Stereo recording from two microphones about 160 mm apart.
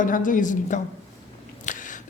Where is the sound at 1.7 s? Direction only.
55° left (ahead or behind).